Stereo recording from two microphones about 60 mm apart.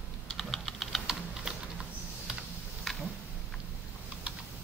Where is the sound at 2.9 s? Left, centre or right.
Centre.